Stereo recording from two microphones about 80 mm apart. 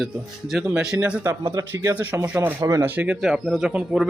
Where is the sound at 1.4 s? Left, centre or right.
Right.